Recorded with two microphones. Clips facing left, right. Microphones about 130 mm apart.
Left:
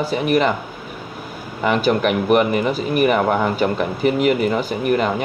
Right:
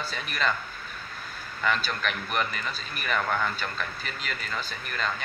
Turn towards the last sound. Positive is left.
turn(degrees=15)  # may be behind; listen again after turning